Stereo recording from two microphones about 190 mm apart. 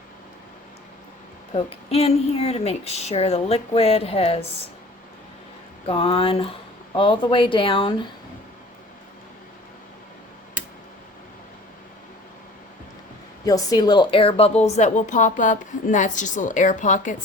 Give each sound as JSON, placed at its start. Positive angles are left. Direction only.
{"t": 1.5, "sound": "a woman's voice", "side_deg": 35}
{"t": 5.9, "sound": "speech", "side_deg": 30}
{"t": 13.4, "sound": "a woman's voice", "side_deg": 20}